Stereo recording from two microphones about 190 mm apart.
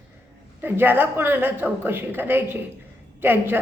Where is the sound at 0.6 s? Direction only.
10° right (ahead or behind).